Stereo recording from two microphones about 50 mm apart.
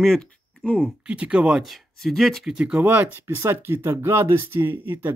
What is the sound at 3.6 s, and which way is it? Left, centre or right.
Speech, right.